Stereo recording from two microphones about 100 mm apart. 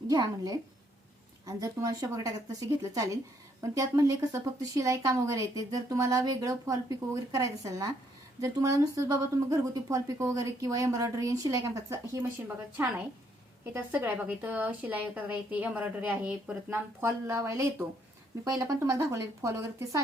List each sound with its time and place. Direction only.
0.1 s speech: 40° right (ahead or behind)
11.6 s speech: 25° right (ahead or behind)
12.7 s a woman's voice: 15° right (ahead or behind); by 20.0 s 30° right (ahead or behind)